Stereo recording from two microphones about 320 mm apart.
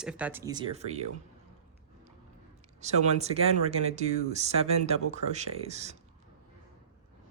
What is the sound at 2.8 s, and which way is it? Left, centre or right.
Speech, centre.